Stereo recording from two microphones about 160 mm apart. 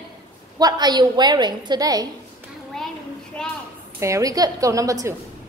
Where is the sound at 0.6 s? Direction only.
25° right (ahead or behind).